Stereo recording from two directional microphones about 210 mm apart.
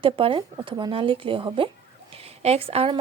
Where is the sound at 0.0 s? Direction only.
25° right (ahead or behind).